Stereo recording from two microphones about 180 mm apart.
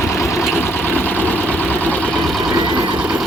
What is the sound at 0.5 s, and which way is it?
Vehicle, 10° left (ahead or behind).